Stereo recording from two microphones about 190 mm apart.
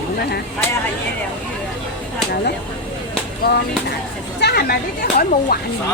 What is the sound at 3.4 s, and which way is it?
Speech, 55° left (ahead or behind).